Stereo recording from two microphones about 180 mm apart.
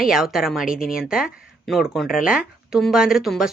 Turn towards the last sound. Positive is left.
turn(degrees=0)  # may be behind; listen again after turning